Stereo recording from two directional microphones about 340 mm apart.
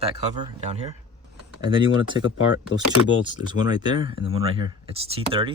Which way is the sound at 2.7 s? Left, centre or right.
Left.